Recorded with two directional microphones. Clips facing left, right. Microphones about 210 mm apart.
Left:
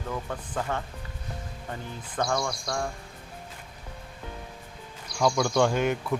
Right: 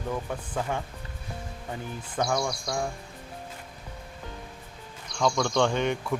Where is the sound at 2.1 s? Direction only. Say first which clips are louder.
Right 1 dB; 5° right (ahead or behind).